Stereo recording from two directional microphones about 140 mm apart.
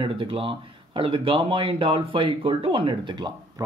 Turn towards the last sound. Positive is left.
turn(degrees=-30)  # may be behind; listen again after turning